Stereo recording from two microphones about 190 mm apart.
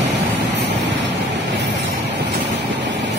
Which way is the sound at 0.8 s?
65° right (ahead or behind).